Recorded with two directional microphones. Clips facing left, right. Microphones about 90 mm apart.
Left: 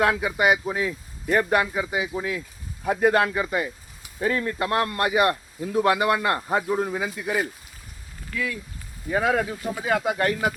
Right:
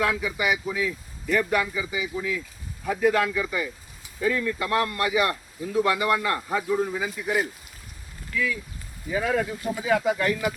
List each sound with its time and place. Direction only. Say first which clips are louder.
0.0 s a man's voice: left 4 dB; 55° left (ahead or behind)
9.0 s a man's voice: left 2 dB; 60° left (ahead or behind)